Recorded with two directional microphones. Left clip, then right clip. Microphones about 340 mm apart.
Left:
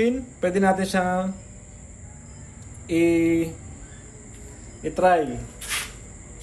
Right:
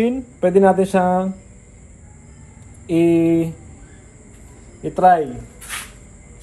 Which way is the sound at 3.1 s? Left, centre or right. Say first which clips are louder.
Right 5 dB; centre.